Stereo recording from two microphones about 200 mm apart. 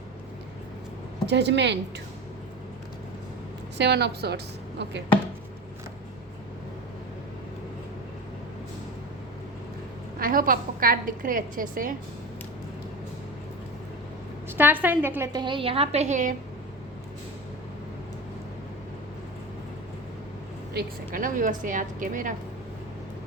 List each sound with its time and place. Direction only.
1.3 s a woman's voice: 60° right (ahead or behind)
3.8 s a woman's voice: 55° right (ahead or behind)
10.2 s a woman's voice: 45° right (ahead or behind)
14.6 s a woman's voice: 10° right (ahead or behind); by 16.3 s 35° right (ahead or behind)
20.7 s a woman's voice: 45° right (ahead or behind)